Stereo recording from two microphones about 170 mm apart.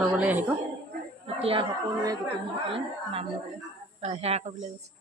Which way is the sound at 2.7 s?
35° right (ahead or behind).